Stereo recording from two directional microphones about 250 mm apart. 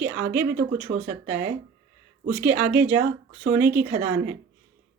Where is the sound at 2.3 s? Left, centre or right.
Centre.